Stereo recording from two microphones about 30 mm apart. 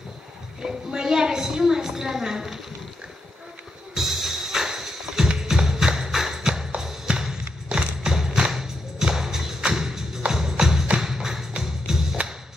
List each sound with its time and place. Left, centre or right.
0.6 s a child's voice: right
1.0 s a sound: centre
3.9 s music: centre
8.0 s thump: centre
8.4 s music: right